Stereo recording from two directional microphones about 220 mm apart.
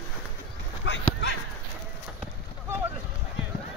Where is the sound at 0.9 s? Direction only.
60° left (ahead or behind).